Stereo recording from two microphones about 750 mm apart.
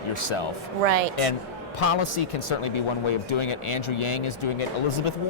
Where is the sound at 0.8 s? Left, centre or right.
Right.